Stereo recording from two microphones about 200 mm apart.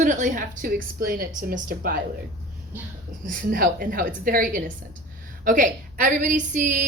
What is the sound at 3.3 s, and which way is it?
A woman's voice, 45° right (ahead or behind).